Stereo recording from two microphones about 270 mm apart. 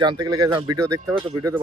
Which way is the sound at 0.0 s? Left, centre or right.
Centre.